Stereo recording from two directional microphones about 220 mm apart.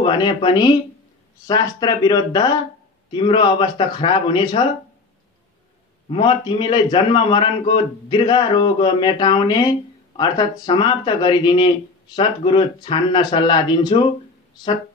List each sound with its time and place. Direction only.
0.0 s a man's voice: 20° left (ahead or behind)
6.0 s a man's voice: 25° left (ahead or behind)